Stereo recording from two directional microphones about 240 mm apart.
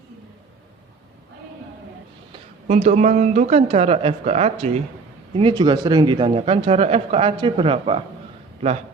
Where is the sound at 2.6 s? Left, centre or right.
Right.